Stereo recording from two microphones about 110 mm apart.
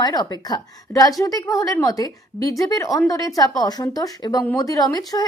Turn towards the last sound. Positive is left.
turn(degrees=35)  # may be behind; listen again after turning